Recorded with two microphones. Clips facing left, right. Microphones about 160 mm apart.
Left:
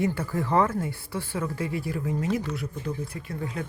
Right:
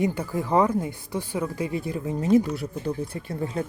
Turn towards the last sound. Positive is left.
turn(degrees=-30)  # may be behind; listen again after turning